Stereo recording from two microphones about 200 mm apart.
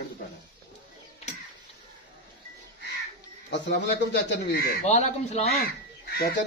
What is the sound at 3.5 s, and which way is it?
Speech, 60° left (ahead or behind).